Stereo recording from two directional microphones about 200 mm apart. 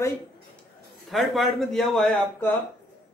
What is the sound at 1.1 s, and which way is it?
A man's voice, centre (ahead or behind).